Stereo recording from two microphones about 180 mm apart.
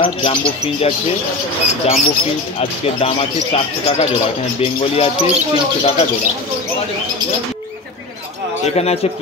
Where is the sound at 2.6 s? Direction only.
35° left (ahead or behind).